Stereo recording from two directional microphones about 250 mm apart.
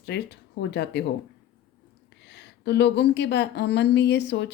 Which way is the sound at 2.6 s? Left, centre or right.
Left.